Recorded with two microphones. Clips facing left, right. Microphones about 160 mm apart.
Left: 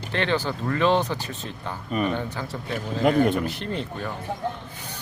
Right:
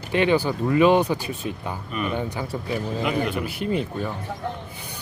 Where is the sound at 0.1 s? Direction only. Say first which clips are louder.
Right 5 dB; 10° right (ahead or behind).